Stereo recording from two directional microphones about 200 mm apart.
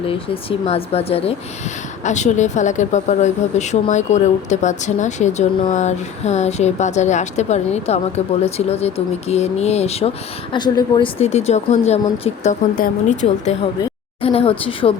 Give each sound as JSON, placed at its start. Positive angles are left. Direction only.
{"t": 0.7, "sound": "speech", "side_deg": 30}
{"t": 11.2, "sound": "speech", "side_deg": 30}